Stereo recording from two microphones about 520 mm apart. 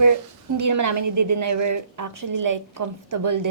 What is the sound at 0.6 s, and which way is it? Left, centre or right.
A woman's voice, right.